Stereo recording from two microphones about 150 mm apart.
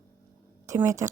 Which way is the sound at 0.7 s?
20° right (ahead or behind).